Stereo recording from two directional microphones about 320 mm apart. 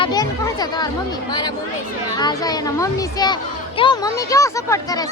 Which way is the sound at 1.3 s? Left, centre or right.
Centre.